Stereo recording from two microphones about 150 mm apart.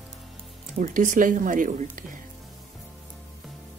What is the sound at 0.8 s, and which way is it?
Speech, 60° right (ahead or behind).